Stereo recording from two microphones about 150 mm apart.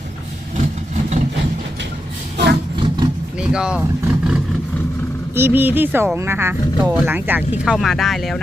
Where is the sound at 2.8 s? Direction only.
30° right (ahead or behind).